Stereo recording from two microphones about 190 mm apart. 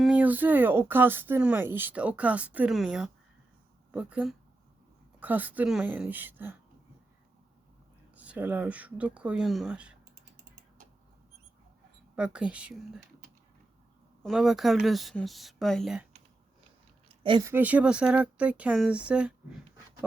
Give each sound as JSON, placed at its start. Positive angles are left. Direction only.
{"t": 0.0, "sound": "speech", "side_deg": -5}
{"t": 8.1, "sound": "speech", "side_deg": -10}
{"t": 12.1, "sound": "speech", "side_deg": -5}
{"t": 14.2, "sound": "speech", "side_deg": 0}
{"t": 17.2, "sound": "speech", "side_deg": -25}
{"t": 17.5, "sound": "speech", "side_deg": -10}